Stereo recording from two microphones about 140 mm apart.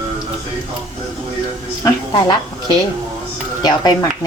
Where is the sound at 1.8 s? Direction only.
30° left (ahead or behind).